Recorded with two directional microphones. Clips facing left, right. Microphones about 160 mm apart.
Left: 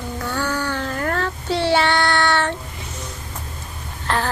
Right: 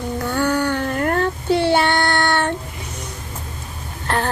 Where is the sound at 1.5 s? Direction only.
50° right (ahead or behind).